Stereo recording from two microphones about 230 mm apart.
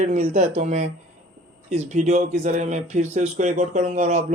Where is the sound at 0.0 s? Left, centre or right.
Right.